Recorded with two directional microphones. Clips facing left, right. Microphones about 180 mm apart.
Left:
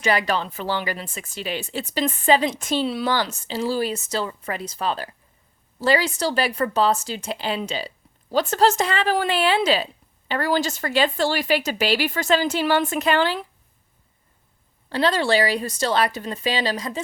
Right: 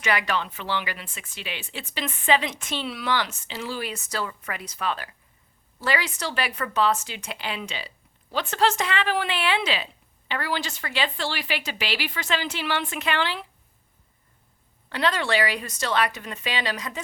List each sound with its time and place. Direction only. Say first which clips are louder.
0.0 s speech: left 4 dB; 35° left (ahead or behind)
14.8 s speech: left 5 dB; 30° left (ahead or behind)